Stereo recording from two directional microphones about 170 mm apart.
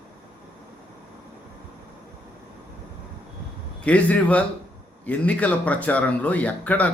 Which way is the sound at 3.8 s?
10° left (ahead or behind).